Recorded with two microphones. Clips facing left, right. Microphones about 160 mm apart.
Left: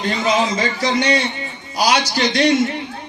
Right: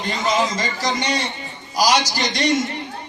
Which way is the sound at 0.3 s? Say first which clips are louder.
Left 2 dB; 60° left (ahead or behind).